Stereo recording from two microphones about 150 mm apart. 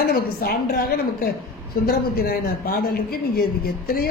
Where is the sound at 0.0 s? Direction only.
90° left.